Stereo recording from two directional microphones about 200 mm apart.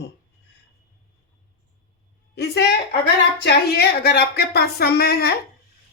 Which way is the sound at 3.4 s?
55° left (ahead or behind).